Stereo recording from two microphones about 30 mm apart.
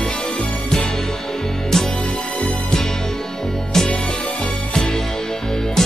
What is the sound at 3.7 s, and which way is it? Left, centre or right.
Music, centre.